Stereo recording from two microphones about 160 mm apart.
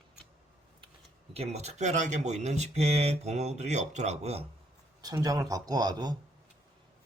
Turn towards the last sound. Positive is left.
turn(degrees=-25)  # may be behind; listen again after turning